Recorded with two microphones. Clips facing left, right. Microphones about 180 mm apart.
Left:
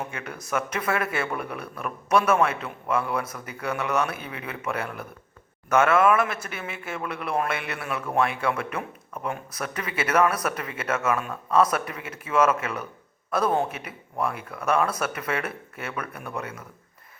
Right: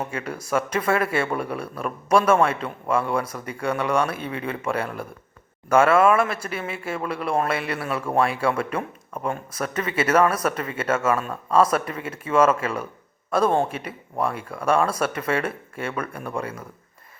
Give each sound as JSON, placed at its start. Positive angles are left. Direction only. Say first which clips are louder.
{"t": 0.1, "sound": "speech", "louder": "right 5 dB", "side_deg": -30}